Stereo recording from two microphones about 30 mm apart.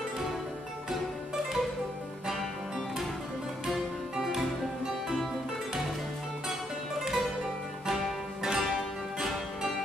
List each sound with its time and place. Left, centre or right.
4.2 s music: centre
7.0 s music: centre